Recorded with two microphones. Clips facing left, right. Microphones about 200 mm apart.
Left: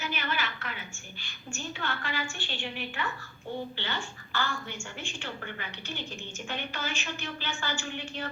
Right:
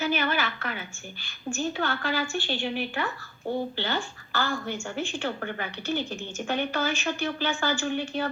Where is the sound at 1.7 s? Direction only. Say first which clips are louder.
Right 7 dB; 40° right (ahead or behind).